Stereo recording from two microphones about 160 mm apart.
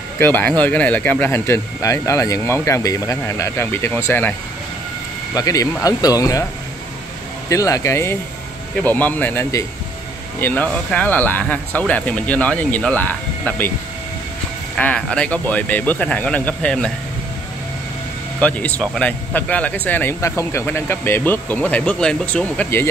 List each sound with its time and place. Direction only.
0.2 s speech: 10° left (ahead or behind)
7.4 s speech: 20° left (ahead or behind)
14.8 s speech: 10° left (ahead or behind)
18.4 s speech: 10° left (ahead or behind)